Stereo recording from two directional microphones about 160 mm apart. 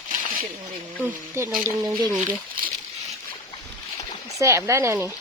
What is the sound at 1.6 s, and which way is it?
Speech, 20° right (ahead or behind).